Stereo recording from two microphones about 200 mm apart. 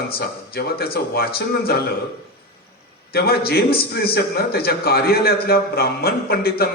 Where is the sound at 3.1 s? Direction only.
50° left (ahead or behind).